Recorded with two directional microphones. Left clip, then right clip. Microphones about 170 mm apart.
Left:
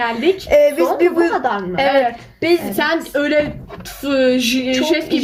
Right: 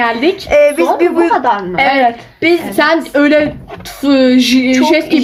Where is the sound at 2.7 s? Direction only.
20° right (ahead or behind).